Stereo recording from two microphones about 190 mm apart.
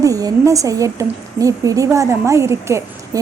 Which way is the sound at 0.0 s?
20° right (ahead or behind).